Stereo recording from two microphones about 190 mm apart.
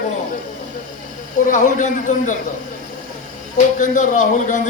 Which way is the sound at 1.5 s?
40° left (ahead or behind).